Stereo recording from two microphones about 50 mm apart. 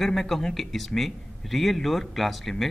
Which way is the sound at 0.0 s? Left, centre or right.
Centre.